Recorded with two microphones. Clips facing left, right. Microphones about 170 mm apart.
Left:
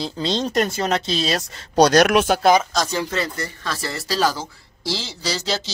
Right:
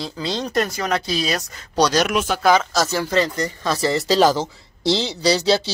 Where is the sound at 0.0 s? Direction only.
20° left (ahead or behind).